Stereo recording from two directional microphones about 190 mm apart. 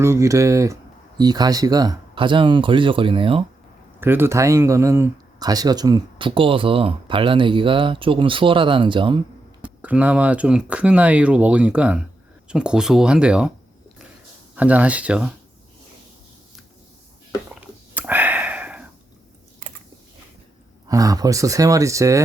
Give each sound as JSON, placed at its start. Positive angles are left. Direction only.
{"t": 0.0, "sound": "speech", "side_deg": -15}
{"t": 4.0, "sound": "speech", "side_deg": -10}
{"t": 9.6, "sound": "speech", "side_deg": -5}
{"t": 14.5, "sound": "speech", "side_deg": -5}
{"t": 17.5, "sound": "a sound", "side_deg": -5}
{"t": 20.8, "sound": "speech", "side_deg": -20}